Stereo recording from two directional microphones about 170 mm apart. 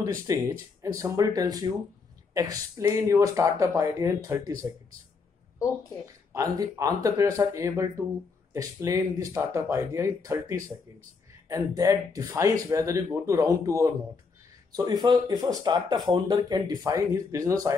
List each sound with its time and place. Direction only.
0.3 s speech: 15° right (ahead or behind)
6.3 s speech: 20° right (ahead or behind)